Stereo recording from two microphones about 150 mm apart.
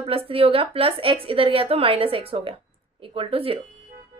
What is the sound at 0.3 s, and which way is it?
A woman's voice, 40° right (ahead or behind).